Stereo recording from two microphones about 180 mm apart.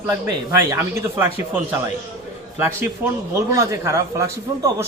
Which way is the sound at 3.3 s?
15° right (ahead or behind).